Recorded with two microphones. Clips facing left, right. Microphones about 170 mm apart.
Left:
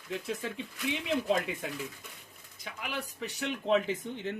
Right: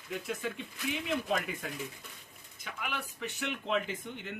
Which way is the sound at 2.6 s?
35° left (ahead or behind).